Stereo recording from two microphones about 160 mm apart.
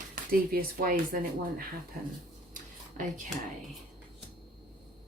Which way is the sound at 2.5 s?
55° right (ahead or behind).